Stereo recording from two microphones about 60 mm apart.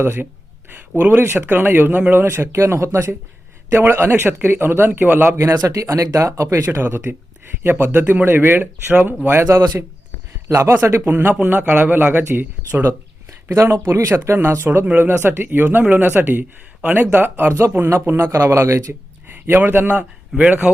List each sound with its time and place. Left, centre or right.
0.0 s a man's voice: right
0.7 s a man's voice: right
3.7 s a man's voice: right
5.5 s speech: right
6.8 s a man's voice: right
11.3 s a man's voice: right
13.5 s a man's voice: right
17.5 s speech: right
19.3 s speech: right